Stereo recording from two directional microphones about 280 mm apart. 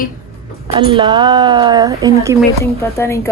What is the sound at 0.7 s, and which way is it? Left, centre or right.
Speech, centre.